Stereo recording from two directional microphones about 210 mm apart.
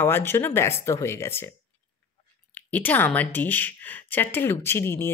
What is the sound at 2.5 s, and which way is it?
Speech, 10° left (ahead or behind).